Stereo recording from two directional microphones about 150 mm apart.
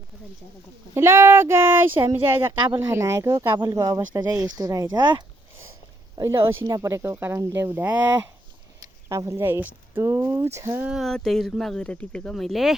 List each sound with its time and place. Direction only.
0.9 s speech: 15° right (ahead or behind)
6.1 s speech: 20° right (ahead or behind)
10.8 s speech: centre (ahead or behind)